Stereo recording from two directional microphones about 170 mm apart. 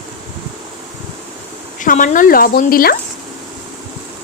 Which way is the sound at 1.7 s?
50° left (ahead or behind).